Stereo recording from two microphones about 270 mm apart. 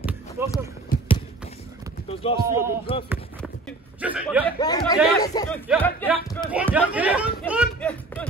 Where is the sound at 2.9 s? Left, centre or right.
Centre.